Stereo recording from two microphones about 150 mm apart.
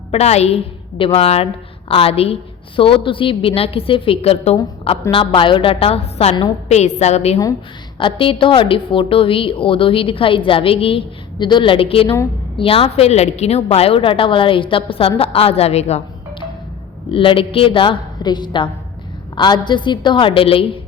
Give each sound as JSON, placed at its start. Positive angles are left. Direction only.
{"t": 0.1, "sound": "a woman's voice", "side_deg": 45}
{"t": 7.9, "sound": "a woman's voice", "side_deg": 35}
{"t": 17.1, "sound": "a woman's voice", "side_deg": 35}